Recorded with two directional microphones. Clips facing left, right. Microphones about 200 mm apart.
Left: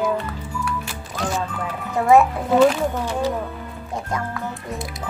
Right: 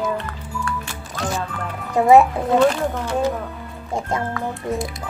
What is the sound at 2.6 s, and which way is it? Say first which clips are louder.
Speech: left 3 dB; centre (ahead or behind).